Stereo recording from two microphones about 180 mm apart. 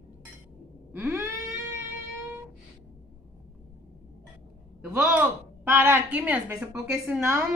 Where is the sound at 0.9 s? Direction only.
15° right (ahead or behind).